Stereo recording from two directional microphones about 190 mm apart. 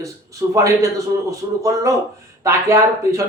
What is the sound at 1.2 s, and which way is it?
Speech, 15° right (ahead or behind).